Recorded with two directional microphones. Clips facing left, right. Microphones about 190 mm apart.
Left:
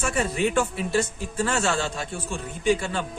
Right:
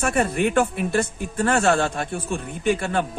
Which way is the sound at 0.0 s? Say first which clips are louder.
Right 3 dB; 55° right (ahead or behind).